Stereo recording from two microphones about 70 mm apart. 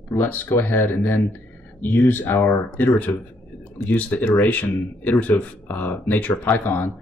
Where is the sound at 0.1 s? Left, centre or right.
Left.